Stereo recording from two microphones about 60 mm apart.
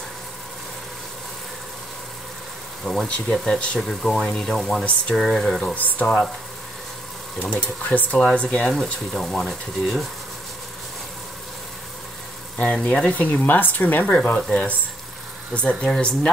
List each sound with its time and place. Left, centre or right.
2.8 s speech: centre
5.8 s speech: left
6.0 s speech: centre
7.3 s speech: left
9.1 s speech: centre
12.5 s speech: left
13.3 s speech: left
15.8 s speech: centre